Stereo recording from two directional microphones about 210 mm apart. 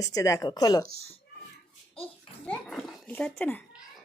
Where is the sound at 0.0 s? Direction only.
15° left (ahead or behind).